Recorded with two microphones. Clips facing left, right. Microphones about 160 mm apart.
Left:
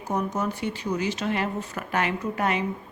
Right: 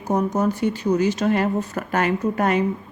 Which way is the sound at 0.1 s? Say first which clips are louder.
Right 6 dB; 40° right (ahead or behind).